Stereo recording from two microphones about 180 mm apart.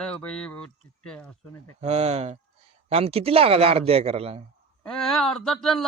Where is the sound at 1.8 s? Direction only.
35° right (ahead or behind).